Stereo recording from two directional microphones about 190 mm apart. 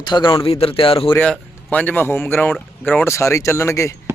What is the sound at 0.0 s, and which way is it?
A man's voice, 25° left (ahead or behind).